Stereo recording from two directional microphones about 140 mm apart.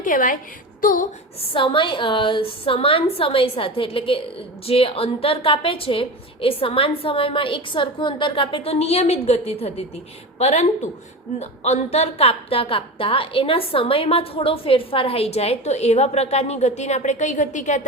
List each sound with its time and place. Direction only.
0.0 s a woman's voice: 70° left (ahead or behind)
1.4 s a woman's voice: 40° left (ahead or behind); by 17.8 s 60° left (ahead or behind)